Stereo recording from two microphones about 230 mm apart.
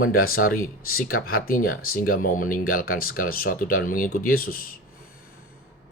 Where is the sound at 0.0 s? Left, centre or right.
Left.